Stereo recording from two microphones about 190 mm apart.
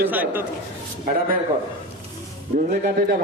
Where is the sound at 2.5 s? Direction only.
45° right (ahead or behind).